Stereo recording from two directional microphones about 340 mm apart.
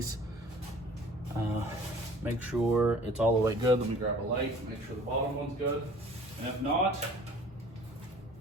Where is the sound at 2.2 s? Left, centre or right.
Centre.